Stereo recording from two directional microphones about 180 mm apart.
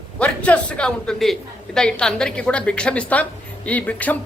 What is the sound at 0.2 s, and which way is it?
Speech, 5° left (ahead or behind).